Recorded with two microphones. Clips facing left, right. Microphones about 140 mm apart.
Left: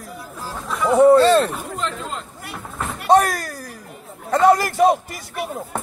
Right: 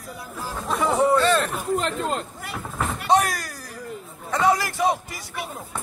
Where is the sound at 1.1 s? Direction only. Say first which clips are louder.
Left 6 dB; 30° left (ahead or behind).